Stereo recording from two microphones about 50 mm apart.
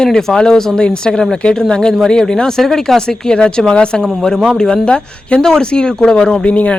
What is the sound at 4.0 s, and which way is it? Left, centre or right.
Speech, centre.